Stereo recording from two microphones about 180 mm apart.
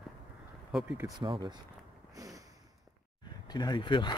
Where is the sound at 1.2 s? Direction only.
25° right (ahead or behind).